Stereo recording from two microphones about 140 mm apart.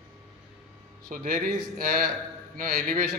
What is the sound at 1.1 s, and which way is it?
Speech, 80° right.